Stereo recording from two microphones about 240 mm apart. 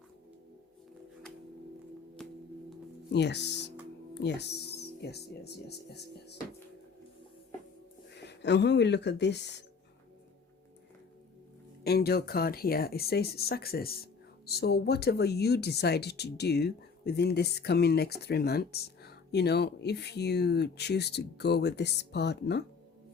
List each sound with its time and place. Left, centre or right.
2.2 s music: centre
3.1 s speech: left
8.1 s speech: left
11.8 s speech: left